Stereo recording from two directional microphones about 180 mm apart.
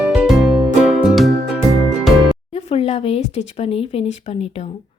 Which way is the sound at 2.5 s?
35° left (ahead or behind).